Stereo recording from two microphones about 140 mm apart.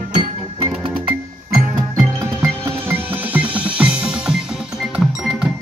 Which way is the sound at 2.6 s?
15° right (ahead or behind).